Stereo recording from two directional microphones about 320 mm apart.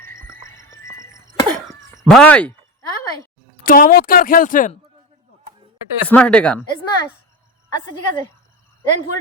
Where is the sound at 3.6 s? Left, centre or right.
Left.